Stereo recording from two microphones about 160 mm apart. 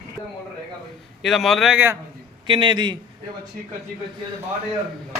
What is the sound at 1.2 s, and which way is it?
Speech, centre (ahead or behind).